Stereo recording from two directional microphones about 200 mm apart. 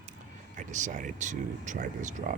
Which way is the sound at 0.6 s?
40° right (ahead or behind).